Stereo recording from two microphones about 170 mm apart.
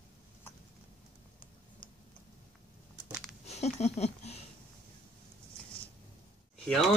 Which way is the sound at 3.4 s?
40° left (ahead or behind).